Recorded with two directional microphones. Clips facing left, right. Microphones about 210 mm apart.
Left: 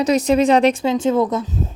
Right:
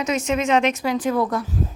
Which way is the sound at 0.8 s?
25° left (ahead or behind).